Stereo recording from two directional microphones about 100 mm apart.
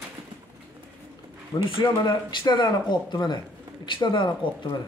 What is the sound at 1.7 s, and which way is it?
Speech, 50° left (ahead or behind).